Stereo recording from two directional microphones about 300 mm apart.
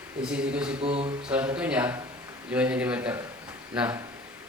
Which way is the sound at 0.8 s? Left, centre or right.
Centre.